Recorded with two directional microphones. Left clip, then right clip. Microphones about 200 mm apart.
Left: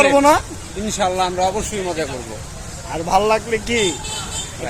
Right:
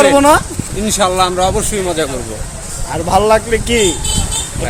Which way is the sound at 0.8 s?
20° right (ahead or behind).